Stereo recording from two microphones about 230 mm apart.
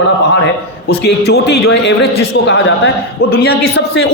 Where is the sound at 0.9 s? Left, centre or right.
Left.